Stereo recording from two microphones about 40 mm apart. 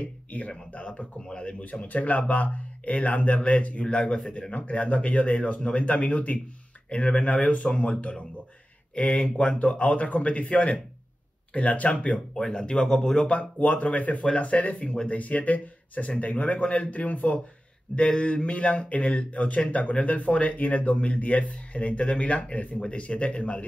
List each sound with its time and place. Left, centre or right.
0.7 s speech: left
1.6 s speech: left; by 13.3 s centre
13.3 s speech: left
17.9 s speech: left